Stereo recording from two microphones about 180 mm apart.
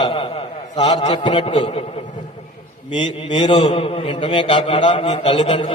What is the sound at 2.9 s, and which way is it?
A man's voice, 25° left (ahead or behind).